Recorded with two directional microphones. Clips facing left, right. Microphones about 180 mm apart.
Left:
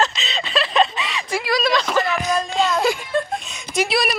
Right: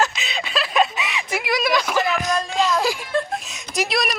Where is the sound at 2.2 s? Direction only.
Centre (ahead or behind).